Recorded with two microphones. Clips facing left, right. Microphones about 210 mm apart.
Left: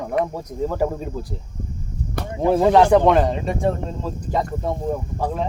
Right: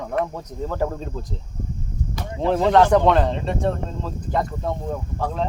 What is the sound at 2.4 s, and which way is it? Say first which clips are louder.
Speech: left 2 dB; 10° left (ahead or behind).